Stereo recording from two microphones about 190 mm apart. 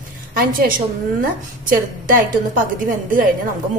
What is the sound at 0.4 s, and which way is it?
A woman's voice, 50° right (ahead or behind).